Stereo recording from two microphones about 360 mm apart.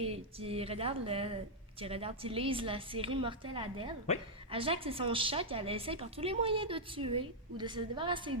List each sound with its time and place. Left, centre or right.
0.0 s a woman's voice: centre